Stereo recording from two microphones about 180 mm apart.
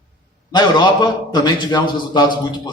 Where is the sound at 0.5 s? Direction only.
25° left (ahead or behind).